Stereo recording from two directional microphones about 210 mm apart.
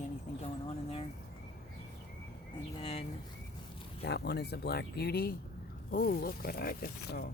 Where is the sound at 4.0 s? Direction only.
50° left (ahead or behind).